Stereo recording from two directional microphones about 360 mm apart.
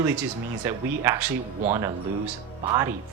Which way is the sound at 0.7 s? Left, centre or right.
Centre.